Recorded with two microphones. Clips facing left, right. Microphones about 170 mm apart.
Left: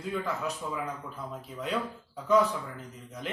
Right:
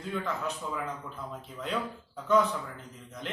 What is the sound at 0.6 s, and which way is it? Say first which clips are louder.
A man's voice: left 1 dB; centre (ahead or behind).